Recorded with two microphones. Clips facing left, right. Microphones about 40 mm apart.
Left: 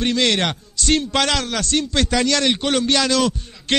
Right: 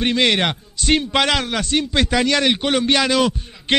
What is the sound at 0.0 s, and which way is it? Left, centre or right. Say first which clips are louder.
A man's voice: right 1 dB; centre.